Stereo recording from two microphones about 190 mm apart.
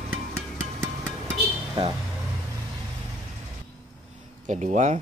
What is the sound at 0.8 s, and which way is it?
Music, 15° right (ahead or behind).